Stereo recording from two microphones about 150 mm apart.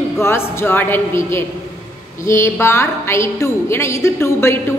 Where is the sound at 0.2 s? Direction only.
15° left (ahead or behind).